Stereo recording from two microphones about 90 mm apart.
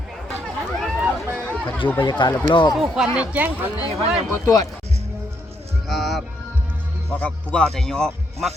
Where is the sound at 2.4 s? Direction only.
55° left (ahead or behind).